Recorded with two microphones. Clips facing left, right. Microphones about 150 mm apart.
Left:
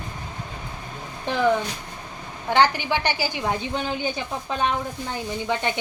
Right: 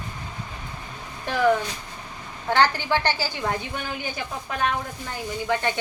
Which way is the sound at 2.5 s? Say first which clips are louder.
Left 1 dB; 15° left (ahead or behind).